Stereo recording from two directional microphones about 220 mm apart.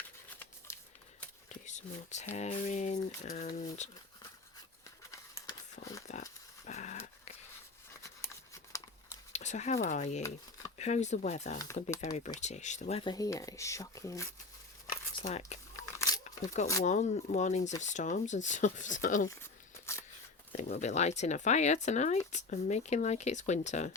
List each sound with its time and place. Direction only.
0.7 s shuffling cards: 10° left (ahead or behind)
1.5 s speech: 35° left (ahead or behind)
5.1 s a sound: 15° left (ahead or behind)
5.8 s a sound: 40° left (ahead or behind)
6.7 s dog: 30° left (ahead or behind)
8.5 s crumpling: 15° left (ahead or behind)
9.3 s speech: 30° left (ahead or behind)
11.5 s speech: 15° left (ahead or behind)
12.4 s speech: 30° left (ahead or behind); by 14.3 s 15° left (ahead or behind)
15.2 s speech: 30° left (ahead or behind)
15.7 s crunch: 15° left (ahead or behind)
16.8 s speech: 35° left (ahead or behind)
20.5 s speech: 35° left (ahead or behind)